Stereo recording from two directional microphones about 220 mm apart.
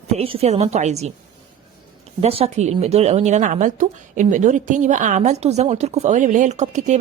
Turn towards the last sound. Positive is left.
turn(degrees=-30)  # may be behind; listen again after turning